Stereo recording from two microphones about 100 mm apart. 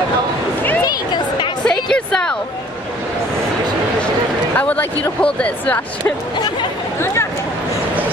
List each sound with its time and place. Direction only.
0.8 s a sound: 50° left (ahead or behind)
1.7 s music: 5° left (ahead or behind)
4.6 s speech: 15° left (ahead or behind)